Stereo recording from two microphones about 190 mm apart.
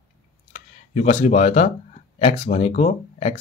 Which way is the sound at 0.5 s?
40° left (ahead or behind).